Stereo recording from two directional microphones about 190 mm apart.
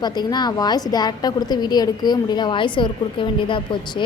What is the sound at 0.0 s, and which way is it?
A woman's voice, 20° left (ahead or behind).